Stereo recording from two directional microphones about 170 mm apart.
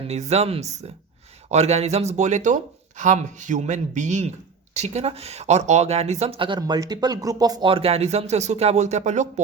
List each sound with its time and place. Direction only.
0.1 s speech: 40° right (ahead or behind)